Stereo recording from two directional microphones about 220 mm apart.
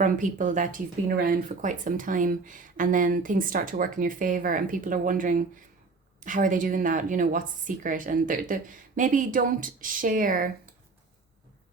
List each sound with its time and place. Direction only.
0.0 s speech: 35° right (ahead or behind)